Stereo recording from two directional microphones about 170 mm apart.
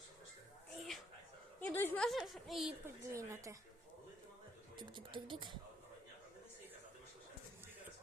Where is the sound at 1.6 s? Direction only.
10° left (ahead or behind).